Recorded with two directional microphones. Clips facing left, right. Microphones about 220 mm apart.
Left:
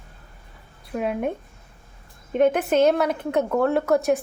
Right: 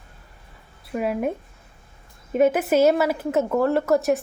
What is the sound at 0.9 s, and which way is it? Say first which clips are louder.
Speech: right 1 dB; 5° right (ahead or behind).